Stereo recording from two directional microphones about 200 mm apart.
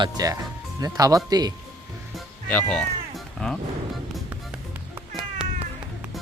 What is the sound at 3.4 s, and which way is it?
Speech, 5° left (ahead or behind).